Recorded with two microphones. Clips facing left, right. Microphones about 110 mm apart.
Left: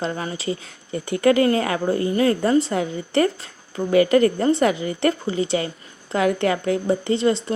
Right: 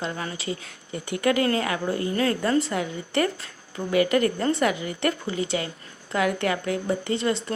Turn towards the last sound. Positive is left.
turn(degrees=25)  # may be behind; listen again after turning